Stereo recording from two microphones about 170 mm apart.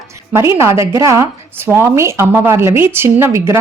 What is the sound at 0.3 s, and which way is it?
A woman's voice, 15° right (ahead or behind).